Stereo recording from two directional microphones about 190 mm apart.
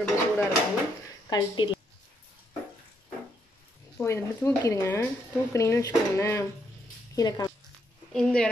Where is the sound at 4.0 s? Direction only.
15° left (ahead or behind).